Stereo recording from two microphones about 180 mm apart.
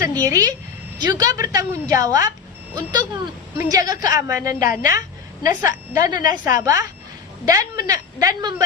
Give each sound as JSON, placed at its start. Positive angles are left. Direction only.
{"t": 0.2, "sound": "a woman's voice", "side_deg": -20}